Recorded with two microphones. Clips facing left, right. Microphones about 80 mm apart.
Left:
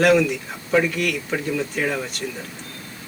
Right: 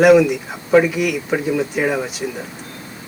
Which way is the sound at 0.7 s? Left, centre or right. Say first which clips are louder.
Right 6 dB; centre.